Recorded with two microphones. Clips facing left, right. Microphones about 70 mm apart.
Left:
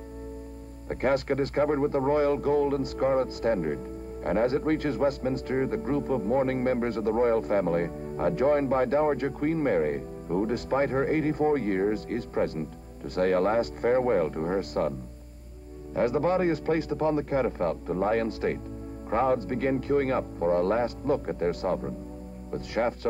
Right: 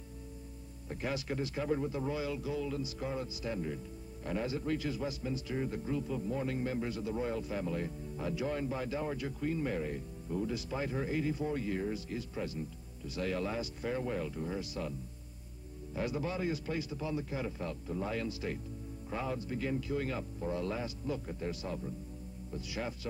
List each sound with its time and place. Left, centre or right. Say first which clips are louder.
0.8 s speech: left 12 dB; left